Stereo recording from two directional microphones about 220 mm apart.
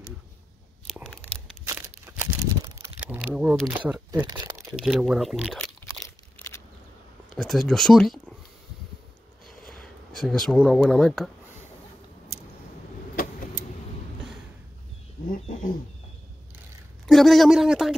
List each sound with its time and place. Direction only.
0.9 s a sound: 5° right (ahead or behind)
1.7 s crumpling: 10° right (ahead or behind)
4.1 s speech: 15° right (ahead or behind)
4.6 s speech: 5° right (ahead or behind)
6.0 s a sound: 10° left (ahead or behind)
7.3 s speech: centre (ahead or behind)
9.5 s speech: centre (ahead or behind)
17.0 s speech: centre (ahead or behind)